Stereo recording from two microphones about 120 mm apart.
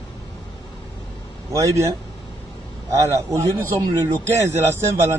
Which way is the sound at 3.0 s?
25° right (ahead or behind).